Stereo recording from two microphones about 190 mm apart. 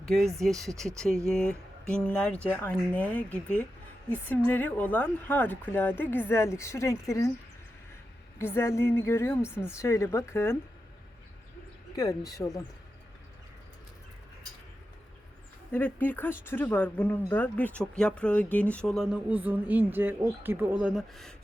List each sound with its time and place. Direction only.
0.1 s speech: centre (ahead or behind)
8.4 s speech: 10° left (ahead or behind)
11.9 s speech: 20° left (ahead or behind)
15.7 s speech: 10° left (ahead or behind)